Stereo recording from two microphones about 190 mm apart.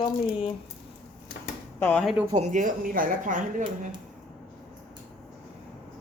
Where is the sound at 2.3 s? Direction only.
40° right (ahead or behind).